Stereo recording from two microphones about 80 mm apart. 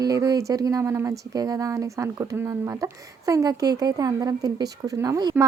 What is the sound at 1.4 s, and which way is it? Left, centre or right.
Speech, right.